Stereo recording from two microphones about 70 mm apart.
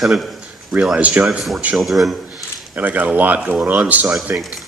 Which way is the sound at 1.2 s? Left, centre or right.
Centre.